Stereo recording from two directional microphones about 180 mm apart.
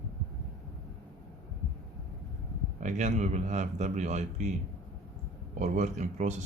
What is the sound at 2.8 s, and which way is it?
Speech, 40° right (ahead or behind).